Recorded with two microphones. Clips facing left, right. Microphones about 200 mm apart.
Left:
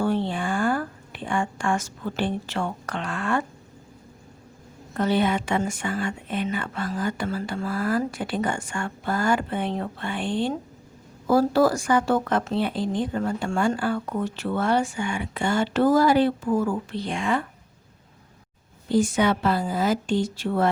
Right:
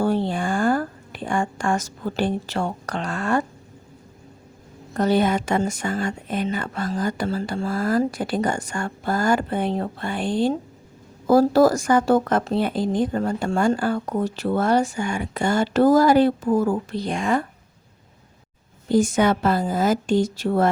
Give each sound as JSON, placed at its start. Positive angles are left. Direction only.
{"t": 0.0, "sound": "a sound", "side_deg": -40}
{"t": 2.6, "sound": "speech", "side_deg": -40}
{"t": 4.9, "sound": "speech", "side_deg": -40}
{"t": 18.9, "sound": "a woman's voice", "side_deg": -45}